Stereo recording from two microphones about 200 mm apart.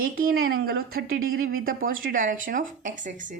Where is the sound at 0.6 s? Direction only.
50° right (ahead or behind).